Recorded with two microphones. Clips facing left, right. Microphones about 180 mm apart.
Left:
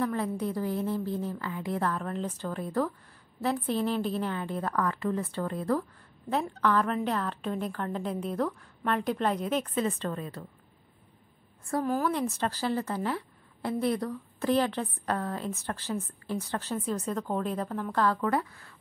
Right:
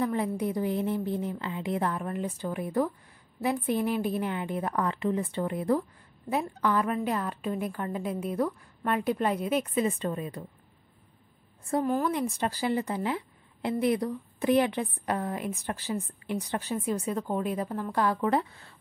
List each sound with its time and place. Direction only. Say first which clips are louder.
0.0 s a woman's voice: right 1 dB; 15° right (ahead or behind)
11.8 s a woman's voice: right 1 dB; 5° left (ahead or behind)
12.1 s a woman's voice: right 1 dB; 15° right (ahead or behind)